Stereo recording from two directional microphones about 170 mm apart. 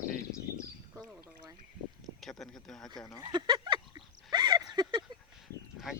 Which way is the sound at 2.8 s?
25° left (ahead or behind).